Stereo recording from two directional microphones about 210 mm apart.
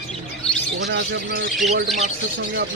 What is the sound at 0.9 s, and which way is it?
Speech, 50° right (ahead or behind).